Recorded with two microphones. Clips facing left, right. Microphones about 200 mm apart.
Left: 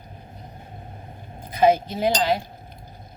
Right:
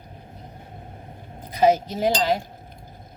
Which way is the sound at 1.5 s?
40° right (ahead or behind).